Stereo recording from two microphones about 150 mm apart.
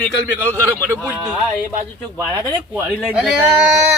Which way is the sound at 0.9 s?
10° right (ahead or behind).